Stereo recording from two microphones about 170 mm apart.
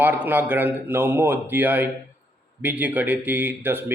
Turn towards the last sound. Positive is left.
turn(degrees=-10)  # may be behind; listen again after turning